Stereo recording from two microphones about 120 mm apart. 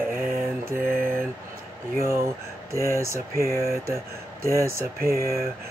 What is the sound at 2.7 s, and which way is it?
Mantra, 25° right (ahead or behind).